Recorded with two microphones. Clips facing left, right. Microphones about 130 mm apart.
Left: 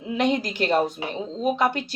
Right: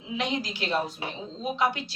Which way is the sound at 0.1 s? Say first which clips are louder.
Left 7 dB; 50° left (ahead or behind).